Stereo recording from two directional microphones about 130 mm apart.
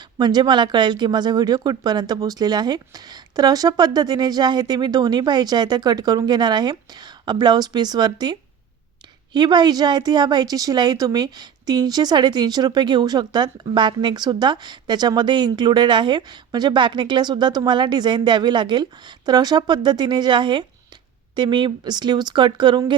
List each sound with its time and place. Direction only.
0.2 s a woman's voice: 35° right (ahead or behind)